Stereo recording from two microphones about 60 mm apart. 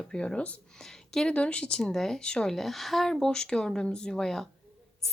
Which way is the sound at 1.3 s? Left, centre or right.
Centre.